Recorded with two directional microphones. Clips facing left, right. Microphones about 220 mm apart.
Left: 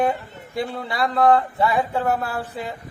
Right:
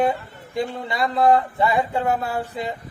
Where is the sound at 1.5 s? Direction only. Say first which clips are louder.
Even; centre (ahead or behind).